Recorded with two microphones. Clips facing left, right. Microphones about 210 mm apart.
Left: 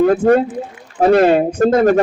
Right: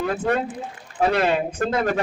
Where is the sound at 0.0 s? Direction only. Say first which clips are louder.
Left 11 dB; 45° left (ahead or behind).